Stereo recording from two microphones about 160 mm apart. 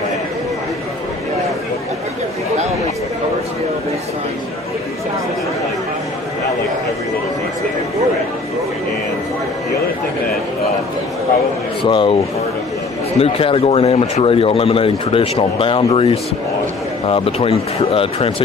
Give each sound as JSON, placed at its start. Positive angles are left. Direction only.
{"t": 11.8, "sound": "a man's voice", "side_deg": 35}
{"t": 13.2, "sound": "speech", "side_deg": 35}